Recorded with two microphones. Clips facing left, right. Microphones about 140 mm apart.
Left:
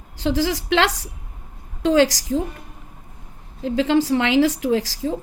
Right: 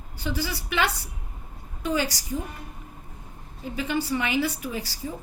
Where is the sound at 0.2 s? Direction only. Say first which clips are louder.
Left 9 dB; 90° left.